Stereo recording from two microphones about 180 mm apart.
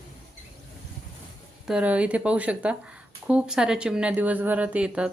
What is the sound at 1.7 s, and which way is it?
Speech, 5° right (ahead or behind).